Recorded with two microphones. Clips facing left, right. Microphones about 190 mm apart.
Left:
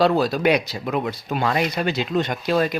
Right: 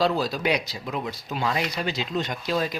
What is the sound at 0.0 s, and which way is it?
Speech, 60° left (ahead or behind).